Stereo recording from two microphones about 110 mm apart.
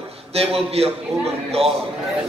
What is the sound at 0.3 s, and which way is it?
Speech, 65° right (ahead or behind).